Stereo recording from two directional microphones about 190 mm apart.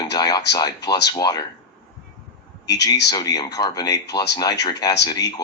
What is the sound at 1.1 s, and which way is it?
Speech, 20° left (ahead or behind).